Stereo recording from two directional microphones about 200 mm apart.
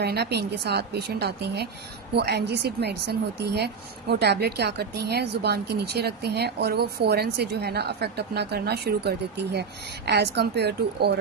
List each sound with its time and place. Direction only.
0.0 s a woman's voice: 55° right (ahead or behind)